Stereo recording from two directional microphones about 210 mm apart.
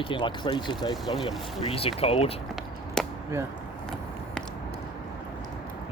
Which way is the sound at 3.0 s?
Centre (ahead or behind).